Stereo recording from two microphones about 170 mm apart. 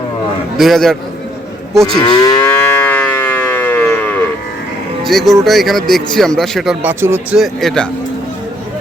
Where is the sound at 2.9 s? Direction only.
10° left (ahead or behind).